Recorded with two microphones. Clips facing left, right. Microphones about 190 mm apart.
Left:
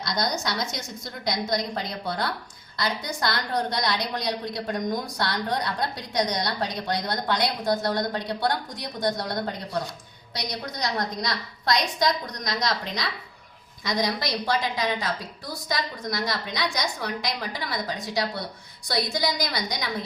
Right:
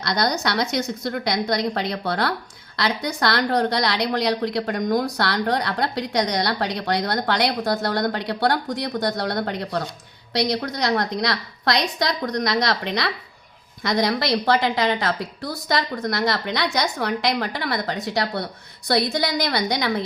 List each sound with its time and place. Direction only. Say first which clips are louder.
0.0 s a woman's voice: right 5 dB; 70° right (ahead or behind)